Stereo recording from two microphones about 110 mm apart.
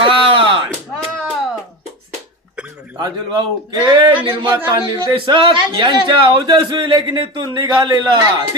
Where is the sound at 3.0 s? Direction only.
45° right (ahead or behind).